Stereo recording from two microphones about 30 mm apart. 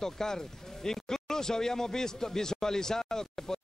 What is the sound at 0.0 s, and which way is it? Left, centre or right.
Speech, centre.